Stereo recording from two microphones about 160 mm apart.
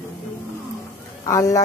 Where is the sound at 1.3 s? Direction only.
20° left (ahead or behind).